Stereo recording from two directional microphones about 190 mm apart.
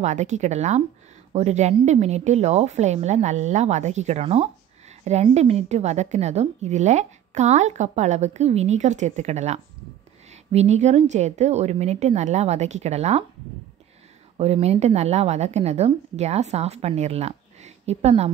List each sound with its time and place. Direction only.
0.0 s a woman's voice: 40° right (ahead or behind)
14.3 s a woman's voice: 35° right (ahead or behind)